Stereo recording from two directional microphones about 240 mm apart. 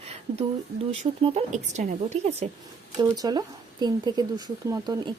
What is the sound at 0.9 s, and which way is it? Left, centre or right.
Speech, right.